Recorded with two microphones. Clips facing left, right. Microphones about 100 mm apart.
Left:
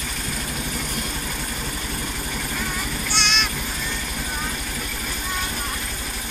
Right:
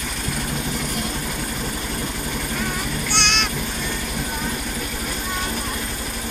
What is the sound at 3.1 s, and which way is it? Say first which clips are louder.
Vehicle: right 1 dB; 65° right (ahead or behind).